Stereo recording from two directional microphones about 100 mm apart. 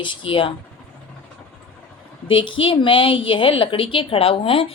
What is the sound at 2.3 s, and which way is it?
A woman's voice, 60° left (ahead or behind).